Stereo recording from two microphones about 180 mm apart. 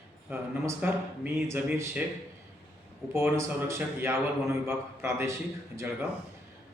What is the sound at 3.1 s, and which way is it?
A man's voice, 15° right (ahead or behind).